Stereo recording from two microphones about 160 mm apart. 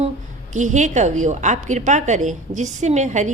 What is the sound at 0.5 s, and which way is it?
A woman's voice, 50° right (ahead or behind).